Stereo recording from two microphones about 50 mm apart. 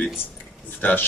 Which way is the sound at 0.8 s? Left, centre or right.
Left.